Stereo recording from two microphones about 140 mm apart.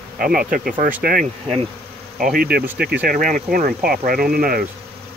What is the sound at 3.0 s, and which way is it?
Speech, 75° right (ahead or behind).